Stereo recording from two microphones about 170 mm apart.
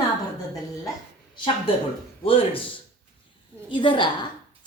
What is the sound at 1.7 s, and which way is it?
Speech, 30° left (ahead or behind).